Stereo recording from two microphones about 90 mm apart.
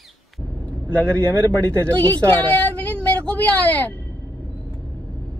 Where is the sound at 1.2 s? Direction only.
30° right (ahead or behind).